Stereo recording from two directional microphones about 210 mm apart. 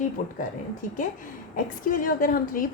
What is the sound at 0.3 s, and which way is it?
A woman's voice, 40° left (ahead or behind).